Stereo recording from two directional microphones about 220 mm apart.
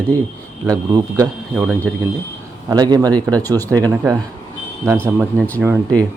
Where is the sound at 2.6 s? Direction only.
20° right (ahead or behind).